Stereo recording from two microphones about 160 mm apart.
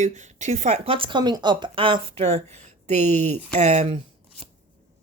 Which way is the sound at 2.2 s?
45° right (ahead or behind).